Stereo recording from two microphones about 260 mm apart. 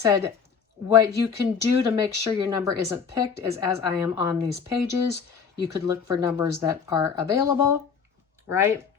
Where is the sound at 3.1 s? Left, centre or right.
Centre.